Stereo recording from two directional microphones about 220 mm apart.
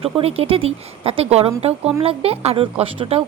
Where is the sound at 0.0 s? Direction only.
25° right (ahead or behind).